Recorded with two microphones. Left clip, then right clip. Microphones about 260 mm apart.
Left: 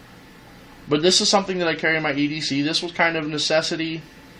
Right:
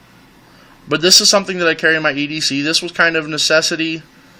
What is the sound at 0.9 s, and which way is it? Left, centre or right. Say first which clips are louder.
A man's voice: right 6 dB; right.